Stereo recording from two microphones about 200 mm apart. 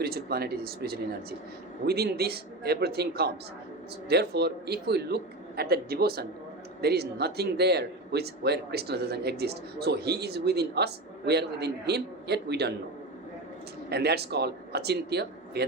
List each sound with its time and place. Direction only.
0.0 s a man's voice: 50° right (ahead or behind)
13.9 s speech: 55° right (ahead or behind)